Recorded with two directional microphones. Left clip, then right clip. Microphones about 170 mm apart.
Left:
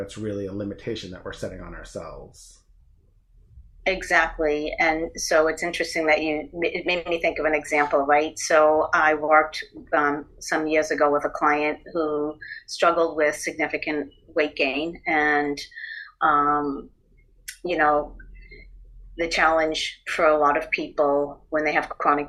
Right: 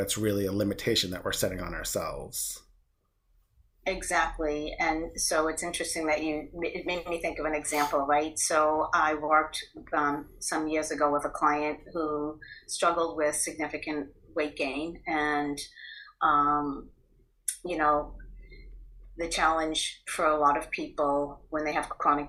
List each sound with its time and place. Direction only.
0.1 s speech: 10° right (ahead or behind)
4.0 s speech: 25° left (ahead or behind)
17.4 s a sound: 30° left (ahead or behind)
19.1 s speech: 25° left (ahead or behind)